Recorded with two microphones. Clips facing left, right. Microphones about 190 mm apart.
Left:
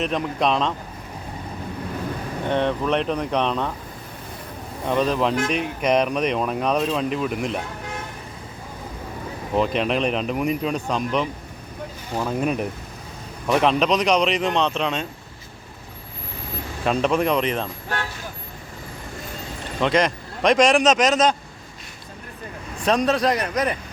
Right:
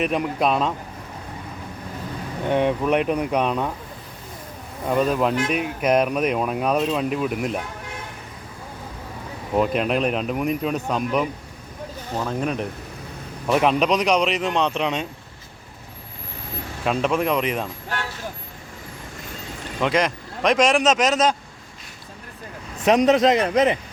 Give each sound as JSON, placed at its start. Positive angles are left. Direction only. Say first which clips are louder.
{"t": 0.0, "sound": "speech", "louder": "right 1 dB", "side_deg": -10}
{"t": 2.5, "sound": "speech", "louder": "right 2 dB", "side_deg": -10}
{"t": 4.9, "sound": "speech", "louder": "right 1 dB", "side_deg": -5}
{"t": 9.6, "sound": "speech", "louder": "right 1 dB", "side_deg": -5}
{"t": 12.1, "sound": "speech", "louder": "left 2 dB", "side_deg": 10}
{"t": 13.5, "sound": "speech", "louder": "even", "side_deg": -10}
{"t": 16.8, "sound": "speech", "louder": "left 1 dB", "side_deg": -5}
{"t": 19.8, "sound": "speech", "louder": "left 1 dB", "side_deg": -5}
{"t": 22.8, "sound": "a man's voice", "louder": "right 4 dB", "side_deg": -20}